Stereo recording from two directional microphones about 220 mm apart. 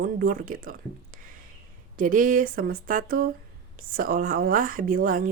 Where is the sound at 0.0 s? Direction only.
40° right (ahead or behind).